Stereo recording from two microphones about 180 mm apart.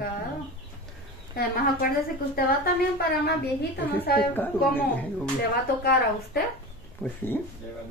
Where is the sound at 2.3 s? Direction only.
55° left (ahead or behind).